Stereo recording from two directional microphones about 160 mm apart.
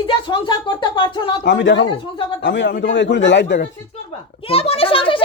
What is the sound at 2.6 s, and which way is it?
Speech, 90° left.